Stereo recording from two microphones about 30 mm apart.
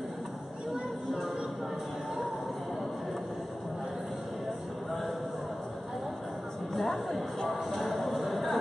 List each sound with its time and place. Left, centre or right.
6.7 s music: centre